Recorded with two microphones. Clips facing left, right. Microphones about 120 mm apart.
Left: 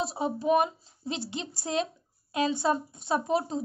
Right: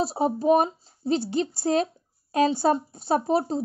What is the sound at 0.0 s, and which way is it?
A woman's voice, 40° right (ahead or behind).